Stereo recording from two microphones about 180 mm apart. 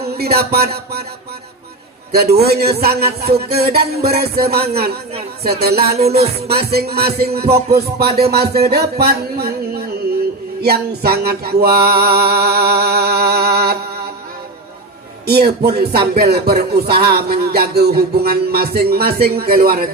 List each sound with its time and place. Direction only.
0.1 s music: 60° right (ahead or behind)
2.1 s music: 60° right (ahead or behind)
15.3 s music: 60° right (ahead or behind)